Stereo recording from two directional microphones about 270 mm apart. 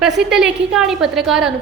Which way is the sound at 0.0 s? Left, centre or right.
Centre.